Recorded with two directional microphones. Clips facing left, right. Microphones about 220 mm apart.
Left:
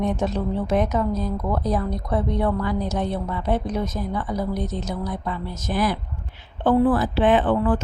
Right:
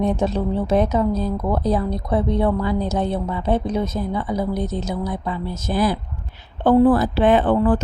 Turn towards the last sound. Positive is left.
turn(degrees=-35)  # may be behind; listen again after turning